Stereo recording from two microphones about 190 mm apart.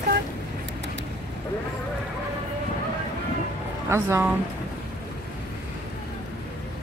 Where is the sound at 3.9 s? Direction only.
15° right (ahead or behind).